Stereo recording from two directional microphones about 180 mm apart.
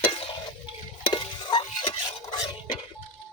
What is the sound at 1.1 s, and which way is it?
Stir, 25° left (ahead or behind).